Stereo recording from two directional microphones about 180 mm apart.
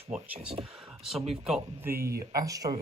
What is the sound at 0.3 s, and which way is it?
Speech, 35° right (ahead or behind).